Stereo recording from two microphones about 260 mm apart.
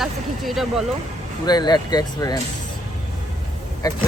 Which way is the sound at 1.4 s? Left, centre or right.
Centre.